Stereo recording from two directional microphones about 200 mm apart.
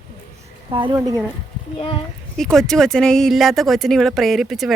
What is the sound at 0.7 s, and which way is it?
Speech, 25° right (ahead or behind).